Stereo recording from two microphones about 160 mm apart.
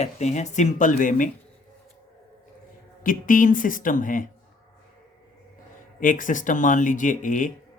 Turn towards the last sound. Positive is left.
turn(degrees=55)  # may be behind; listen again after turning